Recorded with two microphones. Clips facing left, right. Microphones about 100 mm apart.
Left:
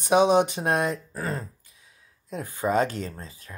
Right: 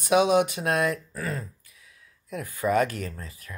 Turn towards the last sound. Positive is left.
turn(degrees=25)  # may be behind; listen again after turning